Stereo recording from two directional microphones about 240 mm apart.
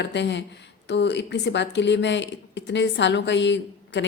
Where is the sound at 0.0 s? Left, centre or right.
Left.